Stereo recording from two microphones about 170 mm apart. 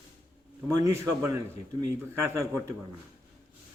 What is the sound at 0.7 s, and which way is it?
A man's voice, 20° right (ahead or behind).